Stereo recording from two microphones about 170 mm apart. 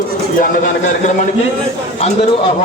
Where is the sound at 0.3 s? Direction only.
55° left (ahead or behind).